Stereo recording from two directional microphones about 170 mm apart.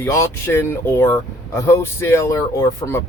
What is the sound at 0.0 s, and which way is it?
Speech, 15° left (ahead or behind).